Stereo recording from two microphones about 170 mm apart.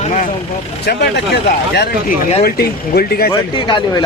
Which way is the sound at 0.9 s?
70° left (ahead or behind).